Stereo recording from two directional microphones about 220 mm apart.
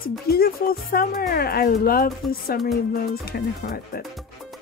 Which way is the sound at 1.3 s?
45° left (ahead or behind).